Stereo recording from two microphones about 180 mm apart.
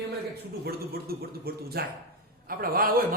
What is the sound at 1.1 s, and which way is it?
A man's voice, 55° right (ahead or behind).